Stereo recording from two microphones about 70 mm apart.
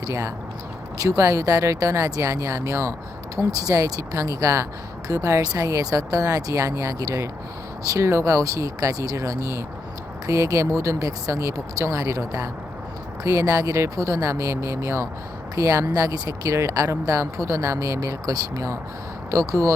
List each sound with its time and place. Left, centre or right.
0.1 s speech: right